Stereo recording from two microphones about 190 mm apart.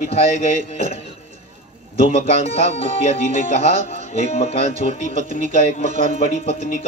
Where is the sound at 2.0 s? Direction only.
40° left (ahead or behind).